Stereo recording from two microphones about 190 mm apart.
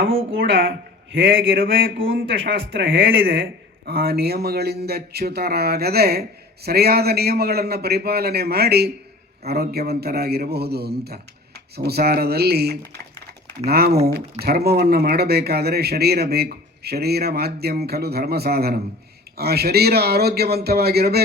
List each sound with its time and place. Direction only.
0.3 s speech: 50° right (ahead or behind)
3.4 s a man's voice: 55° right (ahead or behind)